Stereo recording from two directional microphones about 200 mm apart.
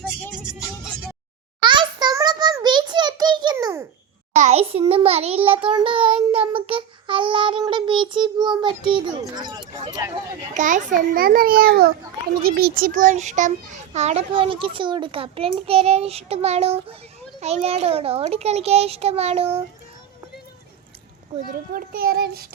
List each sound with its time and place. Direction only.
1.6 s a sound: 25° right (ahead or behind)
4.4 s a child's voice: 35° right (ahead or behind)
10.6 s a child's voice: 40° right (ahead or behind)
21.3 s a child's voice: 35° right (ahead or behind)
21.7 s a child's voice: 45° right (ahead or behind)